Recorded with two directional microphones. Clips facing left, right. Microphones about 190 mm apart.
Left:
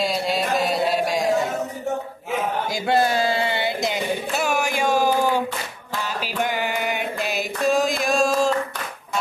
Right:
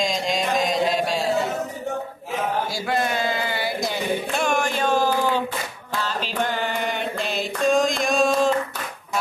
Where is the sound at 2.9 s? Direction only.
35° left (ahead or behind).